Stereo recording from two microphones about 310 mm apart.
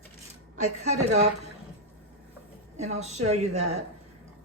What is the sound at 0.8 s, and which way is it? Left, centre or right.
Speech, right.